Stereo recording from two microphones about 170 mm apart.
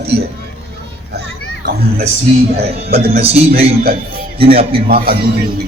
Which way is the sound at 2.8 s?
35° right (ahead or behind).